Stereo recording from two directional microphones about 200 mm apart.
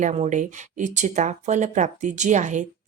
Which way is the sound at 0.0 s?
35° right (ahead or behind).